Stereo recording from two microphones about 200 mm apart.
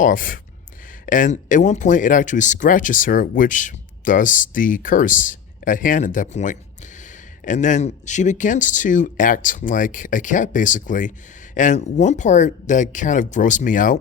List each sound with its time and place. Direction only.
0.0 s speech: 45° left (ahead or behind)